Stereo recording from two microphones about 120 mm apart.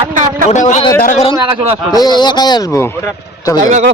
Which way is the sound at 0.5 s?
90° left.